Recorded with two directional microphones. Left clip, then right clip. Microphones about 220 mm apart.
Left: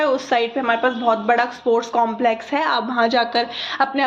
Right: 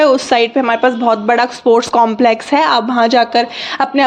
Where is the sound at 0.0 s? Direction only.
45° right (ahead or behind).